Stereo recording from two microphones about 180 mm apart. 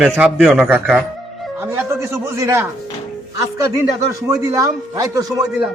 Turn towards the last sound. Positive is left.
turn(degrees=-20)  # may be behind; listen again after turning